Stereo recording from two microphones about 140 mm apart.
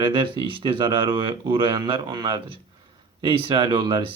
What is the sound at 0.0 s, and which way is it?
Speech, 35° right (ahead or behind).